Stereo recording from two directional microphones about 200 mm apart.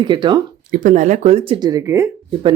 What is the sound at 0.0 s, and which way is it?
Speech, 25° right (ahead or behind).